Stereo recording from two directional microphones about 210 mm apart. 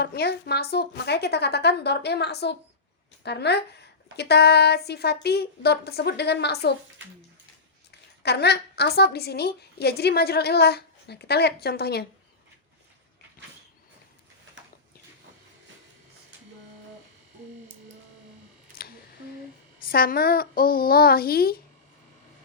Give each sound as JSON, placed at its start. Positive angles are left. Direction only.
{"t": 0.0, "sound": "a woman's voice", "side_deg": 50}
{"t": 7.9, "sound": "a woman's voice", "side_deg": 50}
{"t": 18.8, "sound": "a sound", "side_deg": 45}
{"t": 19.9, "sound": "a woman's voice", "side_deg": 45}